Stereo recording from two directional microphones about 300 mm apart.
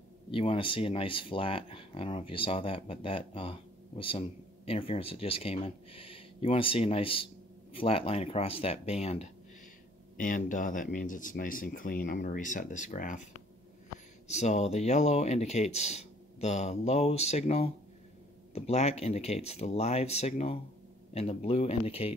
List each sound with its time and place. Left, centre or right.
0.3 s speech: centre
4.6 s speech: centre